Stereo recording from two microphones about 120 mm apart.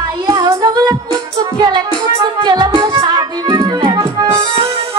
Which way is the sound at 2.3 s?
40° right (ahead or behind).